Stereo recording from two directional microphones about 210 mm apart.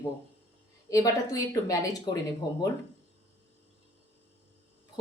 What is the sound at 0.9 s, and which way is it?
Speech, 15° left (ahead or behind).